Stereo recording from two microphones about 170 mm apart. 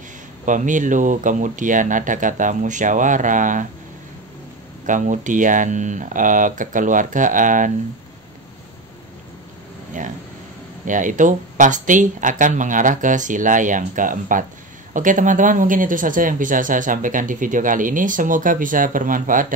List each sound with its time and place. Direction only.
0.5 s speech: 50° right (ahead or behind)
4.8 s speech: 50° right (ahead or behind)
10.9 s speech: 50° right (ahead or behind)